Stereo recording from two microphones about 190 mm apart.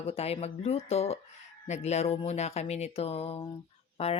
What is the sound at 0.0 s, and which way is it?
Speech, 30° left (ahead or behind).